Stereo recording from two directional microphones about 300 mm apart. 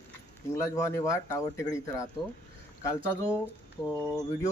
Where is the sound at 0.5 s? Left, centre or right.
Centre.